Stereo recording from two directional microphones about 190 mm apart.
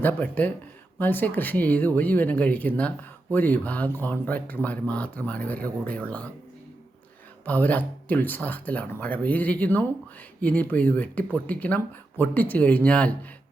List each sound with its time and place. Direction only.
0.0 s speech: 10° left (ahead or behind)
7.4 s speech: 10° left (ahead or behind)